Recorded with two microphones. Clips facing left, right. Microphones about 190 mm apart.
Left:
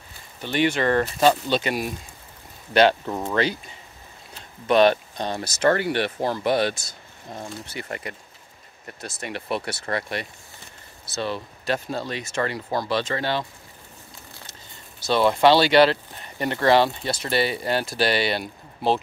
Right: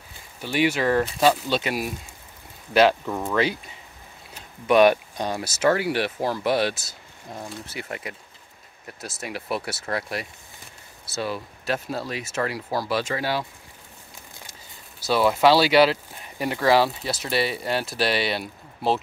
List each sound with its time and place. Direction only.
0.4 s speech: 5° right (ahead or behind)
3.1 s speech: 15° left (ahead or behind)
4.6 s speech: 10° right (ahead or behind)
15.0 s speech: 5° right (ahead or behind)